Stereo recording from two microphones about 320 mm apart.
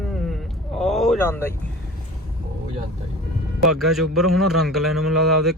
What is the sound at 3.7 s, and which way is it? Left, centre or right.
A man's voice, centre.